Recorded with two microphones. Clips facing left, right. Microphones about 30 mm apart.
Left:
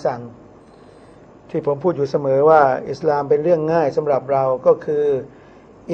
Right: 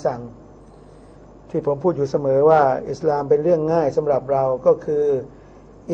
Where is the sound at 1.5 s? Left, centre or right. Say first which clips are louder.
Left 1 dB; left.